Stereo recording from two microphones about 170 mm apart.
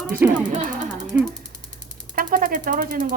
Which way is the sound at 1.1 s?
10° right (ahead or behind).